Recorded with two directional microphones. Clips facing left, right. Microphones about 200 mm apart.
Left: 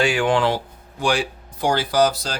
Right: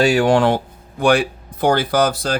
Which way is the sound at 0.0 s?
40° right (ahead or behind).